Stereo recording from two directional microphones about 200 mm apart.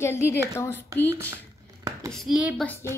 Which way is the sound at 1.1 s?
10° right (ahead or behind).